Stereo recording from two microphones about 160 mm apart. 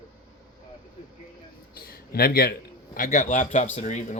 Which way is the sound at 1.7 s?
70° left (ahead or behind).